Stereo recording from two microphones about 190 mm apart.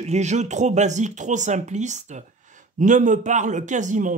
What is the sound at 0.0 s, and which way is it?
Speech, 35° right (ahead or behind).